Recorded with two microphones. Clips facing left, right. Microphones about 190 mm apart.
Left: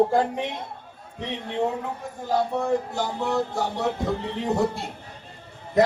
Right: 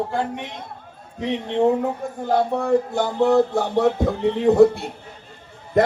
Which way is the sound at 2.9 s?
60° right (ahead or behind).